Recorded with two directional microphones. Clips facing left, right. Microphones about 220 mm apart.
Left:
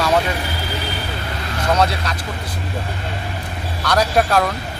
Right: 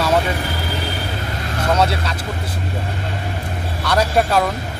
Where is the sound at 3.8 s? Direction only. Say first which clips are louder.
Even; 5° right (ahead or behind).